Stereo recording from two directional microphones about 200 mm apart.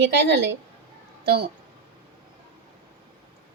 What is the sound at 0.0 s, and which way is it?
Speech, 60° right (ahead or behind).